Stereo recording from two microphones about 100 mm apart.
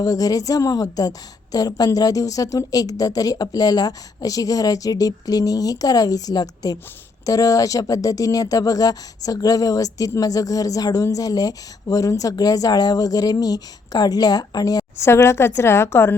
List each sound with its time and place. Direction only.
0.0 s a woman's voice: 35° left (ahead or behind)
15.0 s a woman's voice: 25° left (ahead or behind)